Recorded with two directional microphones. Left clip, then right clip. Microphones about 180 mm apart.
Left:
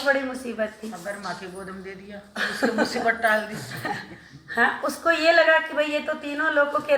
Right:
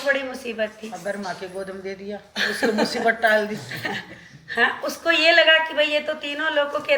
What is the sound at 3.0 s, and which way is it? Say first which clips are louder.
Speech: right 4 dB; 55° right (ahead or behind).